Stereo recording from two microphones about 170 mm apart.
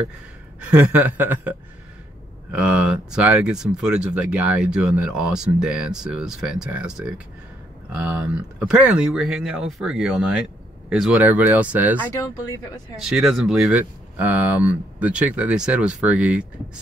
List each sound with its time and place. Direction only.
0.6 s speech: 10° right (ahead or behind)
2.5 s speech: 5° right (ahead or behind)
8.0 s speech: 10° right (ahead or behind)
12.0 s speech: 20° left (ahead or behind)
13.0 s speech: centre (ahead or behind)